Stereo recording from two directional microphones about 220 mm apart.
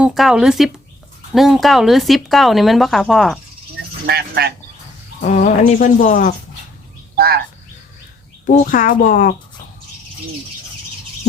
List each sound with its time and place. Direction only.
0.0 s speech: centre (ahead or behind)
4.0 s speech: 45° right (ahead or behind)
5.2 s speech: 35° left (ahead or behind)
7.2 s speech: 45° right (ahead or behind)
8.4 s speech: 35° left (ahead or behind)